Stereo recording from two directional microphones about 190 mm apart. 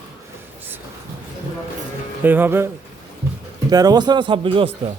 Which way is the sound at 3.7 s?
20° right (ahead or behind).